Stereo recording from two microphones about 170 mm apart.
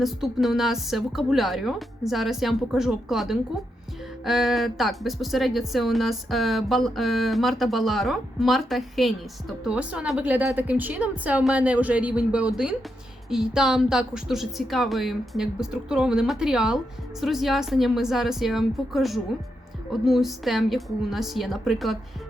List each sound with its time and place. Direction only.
0.0 s speech: centre (ahead or behind)